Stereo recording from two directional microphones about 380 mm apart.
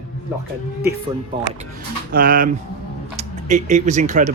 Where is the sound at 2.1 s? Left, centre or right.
Right.